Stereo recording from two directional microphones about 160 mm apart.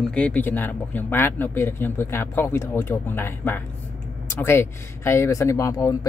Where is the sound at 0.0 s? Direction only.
5° left (ahead or behind).